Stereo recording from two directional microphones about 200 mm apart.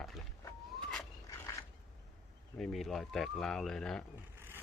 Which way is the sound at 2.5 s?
Centre (ahead or behind).